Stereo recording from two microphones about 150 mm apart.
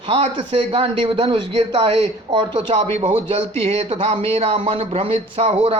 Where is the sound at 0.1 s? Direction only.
45° right (ahead or behind).